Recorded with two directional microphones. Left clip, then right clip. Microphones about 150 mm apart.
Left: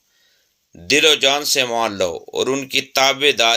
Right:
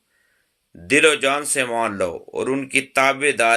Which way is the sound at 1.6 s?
30° left (ahead or behind).